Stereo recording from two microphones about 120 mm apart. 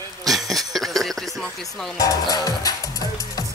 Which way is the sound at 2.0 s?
30° left (ahead or behind).